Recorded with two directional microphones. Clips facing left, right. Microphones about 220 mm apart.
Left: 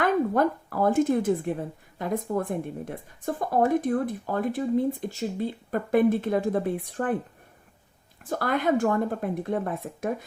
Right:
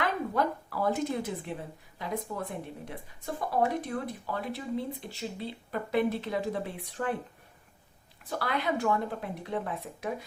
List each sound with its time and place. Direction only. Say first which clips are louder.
0.0 s speech: left 7 dB; 50° left (ahead or behind)
8.2 s speech: left 6 dB; 45° left (ahead or behind)